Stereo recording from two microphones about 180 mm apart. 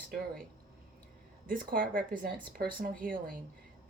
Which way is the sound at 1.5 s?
50° right (ahead or behind).